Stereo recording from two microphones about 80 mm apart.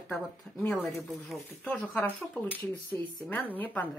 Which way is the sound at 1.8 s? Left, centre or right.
Left.